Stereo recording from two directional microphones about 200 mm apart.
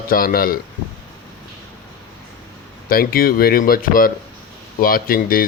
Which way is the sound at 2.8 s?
45° left (ahead or behind).